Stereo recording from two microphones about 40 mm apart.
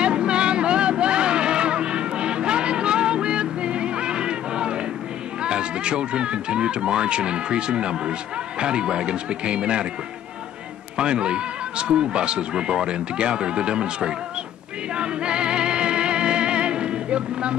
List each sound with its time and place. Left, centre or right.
0.0 s vehicle: right
5.4 s speech: right
11.0 s speech: right
15.0 s music: right